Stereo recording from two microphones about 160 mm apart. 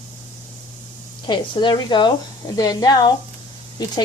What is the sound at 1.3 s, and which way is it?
Speech, 30° left (ahead or behind).